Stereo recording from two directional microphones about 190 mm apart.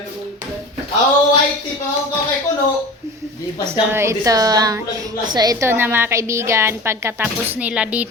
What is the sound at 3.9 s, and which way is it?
A woman's voice, 15° right (ahead or behind).